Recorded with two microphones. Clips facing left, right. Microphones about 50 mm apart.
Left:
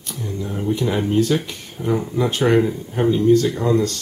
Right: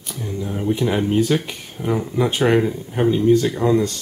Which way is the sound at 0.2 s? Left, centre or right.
Centre.